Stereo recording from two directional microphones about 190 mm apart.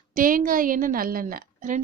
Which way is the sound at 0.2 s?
45° right (ahead or behind).